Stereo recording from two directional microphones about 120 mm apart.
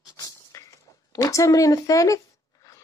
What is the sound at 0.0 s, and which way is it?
Speech, 30° left (ahead or behind).